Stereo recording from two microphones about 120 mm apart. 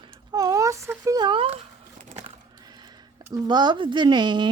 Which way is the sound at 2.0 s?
70° right (ahead or behind).